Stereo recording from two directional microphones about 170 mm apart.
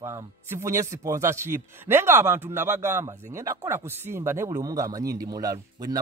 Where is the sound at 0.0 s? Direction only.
15° right (ahead or behind).